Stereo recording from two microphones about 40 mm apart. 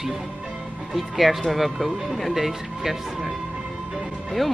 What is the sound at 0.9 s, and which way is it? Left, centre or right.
Speech, centre.